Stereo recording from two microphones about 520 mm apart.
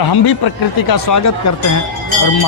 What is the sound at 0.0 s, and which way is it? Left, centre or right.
A man's voice, left.